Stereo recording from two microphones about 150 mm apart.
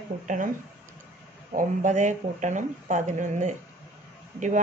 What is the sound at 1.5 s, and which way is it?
Speech, 55° right (ahead or behind).